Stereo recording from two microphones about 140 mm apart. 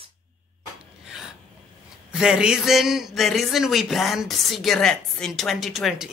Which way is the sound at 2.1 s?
5° right (ahead or behind).